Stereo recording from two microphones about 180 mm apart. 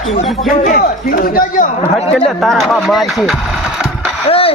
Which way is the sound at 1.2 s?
55° left (ahead or behind).